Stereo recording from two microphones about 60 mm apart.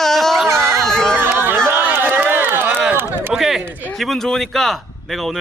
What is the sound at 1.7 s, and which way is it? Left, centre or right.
Run, right.